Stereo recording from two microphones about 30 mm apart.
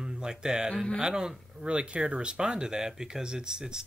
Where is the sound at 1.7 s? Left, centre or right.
Right.